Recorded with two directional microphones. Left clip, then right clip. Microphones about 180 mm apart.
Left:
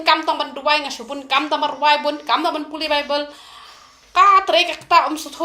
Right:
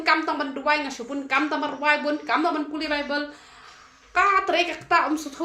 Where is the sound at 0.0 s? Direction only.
25° right (ahead or behind).